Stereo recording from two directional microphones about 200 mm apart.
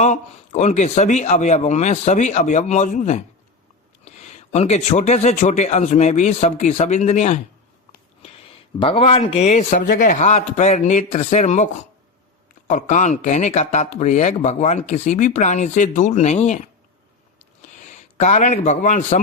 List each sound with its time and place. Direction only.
0.0 s speech: 35° left (ahead or behind)
8.8 s a man's voice: 30° left (ahead or behind)